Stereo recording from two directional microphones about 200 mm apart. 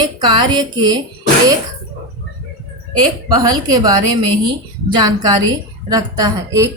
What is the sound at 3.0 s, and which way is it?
A woman's voice, 25° right (ahead or behind).